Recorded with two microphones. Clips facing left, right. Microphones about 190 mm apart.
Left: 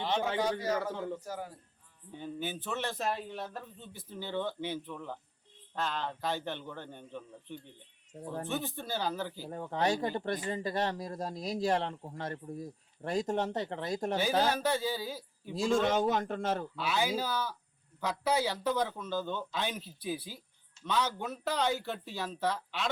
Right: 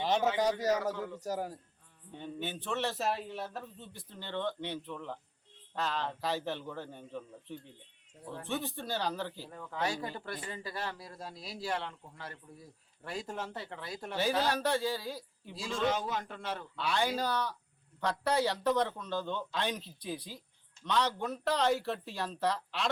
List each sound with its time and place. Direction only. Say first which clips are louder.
0.6 s a man's voice: right 2 dB; 40° right (ahead or behind)
2.1 s a man's voice: left 1 dB; 5° left (ahead or behind)
8.1 s speech: left 6 dB; 40° left (ahead or behind)
8.4 s a man's voice: right 3 dB; centre (ahead or behind)
9.5 s speech: left 7 dB; 35° left (ahead or behind)
14.4 s a man's voice: left 1 dB; centre (ahead or behind)
15.5 s a man's voice: left 5 dB; 50° left (ahead or behind)
16.7 s a man's voice: even; 5° left (ahead or behind)